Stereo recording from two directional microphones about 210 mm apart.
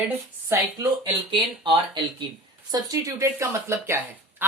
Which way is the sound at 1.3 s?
20° right (ahead or behind).